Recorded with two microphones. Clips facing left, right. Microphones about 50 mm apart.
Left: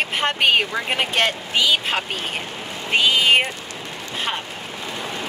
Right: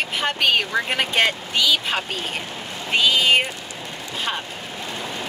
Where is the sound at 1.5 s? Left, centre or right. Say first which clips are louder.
Left 4 dB; left.